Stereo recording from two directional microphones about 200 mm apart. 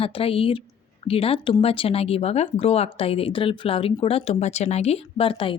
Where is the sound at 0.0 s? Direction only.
30° left (ahead or behind).